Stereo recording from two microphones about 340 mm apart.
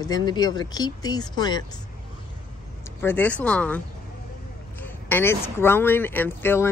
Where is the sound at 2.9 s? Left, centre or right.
Centre.